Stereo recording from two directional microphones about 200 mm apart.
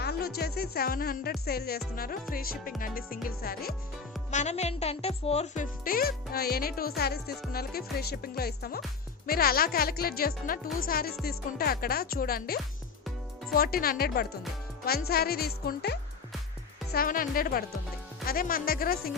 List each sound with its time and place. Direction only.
0.0 s speech: 55° left (ahead or behind)
4.3 s speech: 35° left (ahead or behind)